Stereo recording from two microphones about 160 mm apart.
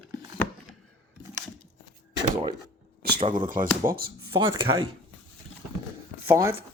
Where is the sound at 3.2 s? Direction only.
30° right (ahead or behind).